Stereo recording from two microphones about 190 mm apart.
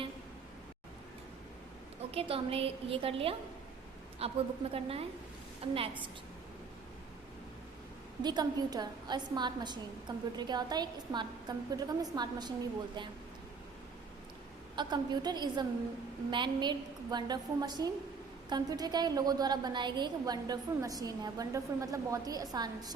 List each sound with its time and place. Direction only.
2.0 s a woman's voice: 30° right (ahead or behind)
8.2 s a woman's voice: 20° right (ahead or behind)
14.8 s a woman's voice: 25° right (ahead or behind)